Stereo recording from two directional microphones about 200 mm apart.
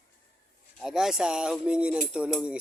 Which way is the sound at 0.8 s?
Centre (ahead or behind).